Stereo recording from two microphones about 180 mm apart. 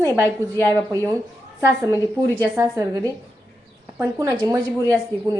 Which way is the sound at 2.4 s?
20° right (ahead or behind).